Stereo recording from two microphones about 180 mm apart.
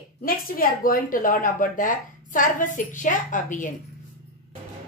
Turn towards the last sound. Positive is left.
turn(degrees=45)  # may be behind; listen again after turning